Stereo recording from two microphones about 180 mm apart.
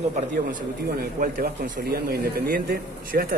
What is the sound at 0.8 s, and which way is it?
Speech, 55° right (ahead or behind).